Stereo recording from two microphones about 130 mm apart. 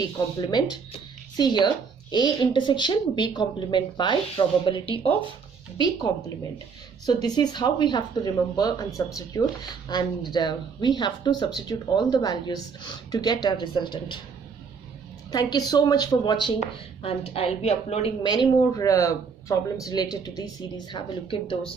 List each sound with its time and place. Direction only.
1.3 s speech: 35° left (ahead or behind)
5.8 s speech: 30° left (ahead or behind)
15.3 s speech: 30° left (ahead or behind)
17.0 s a woman's voice: 50° left (ahead or behind)
18.2 s speech: 35° left (ahead or behind)